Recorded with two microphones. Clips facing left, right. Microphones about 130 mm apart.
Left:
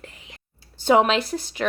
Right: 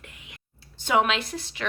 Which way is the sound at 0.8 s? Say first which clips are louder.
Left 5 dB; 35° left (ahead or behind).